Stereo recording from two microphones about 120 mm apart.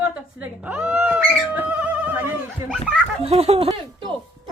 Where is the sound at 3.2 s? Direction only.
55° right (ahead or behind).